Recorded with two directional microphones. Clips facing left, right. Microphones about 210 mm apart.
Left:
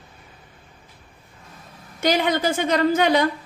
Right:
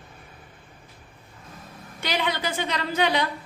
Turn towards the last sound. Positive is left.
turn(degrees=45)  # may be behind; listen again after turning